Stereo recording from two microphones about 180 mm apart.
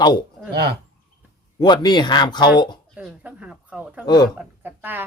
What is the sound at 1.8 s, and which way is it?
Speech, 25° left (ahead or behind).